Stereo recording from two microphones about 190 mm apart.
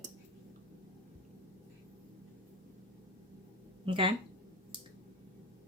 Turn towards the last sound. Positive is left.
turn(degrees=-25)  # may be behind; listen again after turning